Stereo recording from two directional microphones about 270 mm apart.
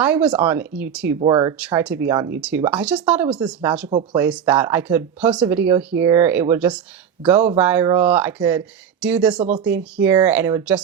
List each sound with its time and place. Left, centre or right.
0.0 s speech: centre
1.5 s speech: centre
3.8 s speech: right
4.2 s speech: centre